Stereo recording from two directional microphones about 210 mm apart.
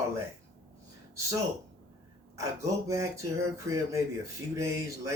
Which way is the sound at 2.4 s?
15° right (ahead or behind).